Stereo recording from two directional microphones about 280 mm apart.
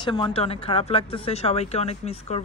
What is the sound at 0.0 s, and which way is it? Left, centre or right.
Speech, centre.